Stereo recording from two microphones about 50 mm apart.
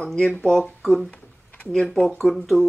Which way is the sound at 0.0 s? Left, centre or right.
Centre.